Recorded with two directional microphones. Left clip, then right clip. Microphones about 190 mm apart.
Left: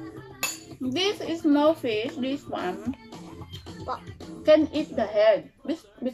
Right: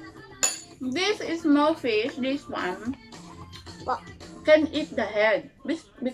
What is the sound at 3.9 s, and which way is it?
Speech, 10° right (ahead or behind).